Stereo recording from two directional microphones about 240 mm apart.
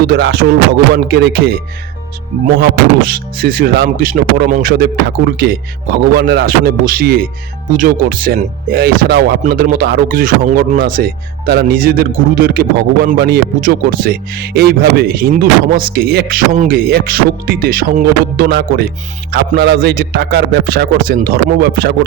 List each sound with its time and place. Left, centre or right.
0.1 s speech: right
2.6 s speech: right